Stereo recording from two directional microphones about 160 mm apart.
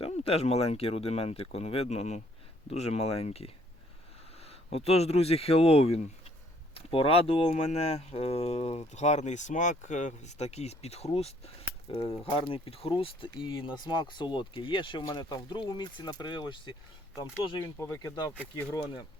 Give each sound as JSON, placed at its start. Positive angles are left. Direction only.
{"t": 0.0, "sound": "speech", "side_deg": 40}
{"t": 17.6, "sound": "speech", "side_deg": 15}